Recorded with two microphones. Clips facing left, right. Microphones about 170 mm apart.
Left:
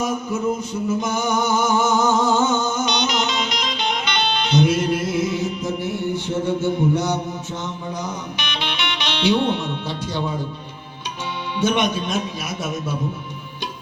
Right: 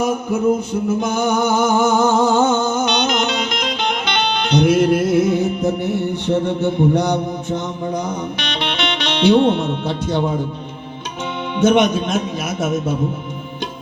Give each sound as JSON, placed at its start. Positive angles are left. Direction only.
{"t": 0.7, "sound": "a sound", "side_deg": -55}
{"t": 8.4, "sound": "speech", "side_deg": -60}
{"t": 11.7, "sound": "a man's voice", "side_deg": -50}